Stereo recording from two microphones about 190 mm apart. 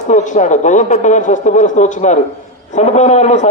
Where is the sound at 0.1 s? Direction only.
40° left (ahead or behind).